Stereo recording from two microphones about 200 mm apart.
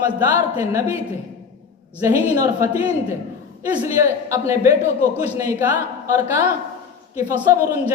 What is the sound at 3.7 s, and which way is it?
A woman's voice, 15° right (ahead or behind).